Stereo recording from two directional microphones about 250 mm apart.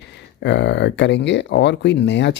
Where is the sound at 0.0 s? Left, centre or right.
Left.